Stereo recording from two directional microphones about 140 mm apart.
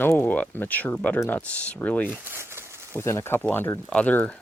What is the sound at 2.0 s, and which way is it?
Crumpling, 10° right (ahead or behind).